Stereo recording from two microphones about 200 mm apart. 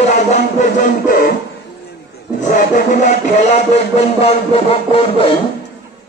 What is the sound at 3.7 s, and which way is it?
Music, 30° left (ahead or behind).